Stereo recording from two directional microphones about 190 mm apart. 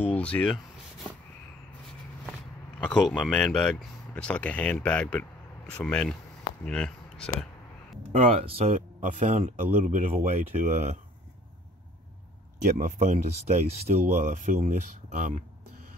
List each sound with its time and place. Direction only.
0.0 s speech: 10° left (ahead or behind)
2.8 s speech: 5° left (ahead or behind)
8.1 s speech: 35° right (ahead or behind)
12.6 s speech: 45° right (ahead or behind)